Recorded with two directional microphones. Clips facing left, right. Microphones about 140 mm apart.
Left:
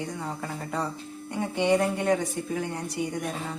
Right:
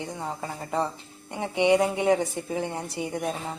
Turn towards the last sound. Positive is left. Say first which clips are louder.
# right 1 dB
turn(degrees=-25)  # may be behind; listen again after turning